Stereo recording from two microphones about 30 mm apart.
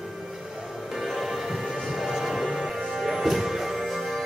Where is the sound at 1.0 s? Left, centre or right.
Centre.